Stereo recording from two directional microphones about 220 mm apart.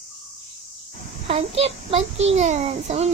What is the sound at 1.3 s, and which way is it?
A child's voice, 25° right (ahead or behind).